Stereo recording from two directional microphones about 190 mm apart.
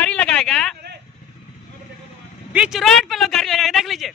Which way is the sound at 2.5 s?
5° right (ahead or behind).